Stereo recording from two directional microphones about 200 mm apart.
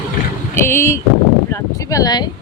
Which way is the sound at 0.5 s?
10° left (ahead or behind).